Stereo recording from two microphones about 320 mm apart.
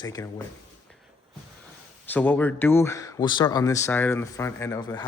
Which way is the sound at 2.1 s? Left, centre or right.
Centre.